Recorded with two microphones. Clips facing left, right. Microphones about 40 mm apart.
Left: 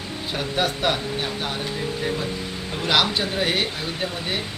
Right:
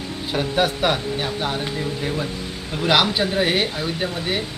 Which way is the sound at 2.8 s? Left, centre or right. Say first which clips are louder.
Right 3 dB; centre.